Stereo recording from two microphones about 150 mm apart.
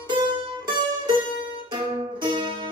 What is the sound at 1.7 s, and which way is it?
Music, 30° right (ahead or behind).